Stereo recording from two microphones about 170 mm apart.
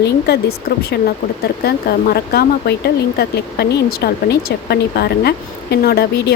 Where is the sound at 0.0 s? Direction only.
70° left (ahead or behind).